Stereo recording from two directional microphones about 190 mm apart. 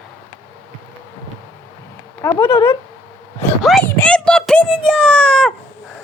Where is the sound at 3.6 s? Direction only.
Centre (ahead or behind).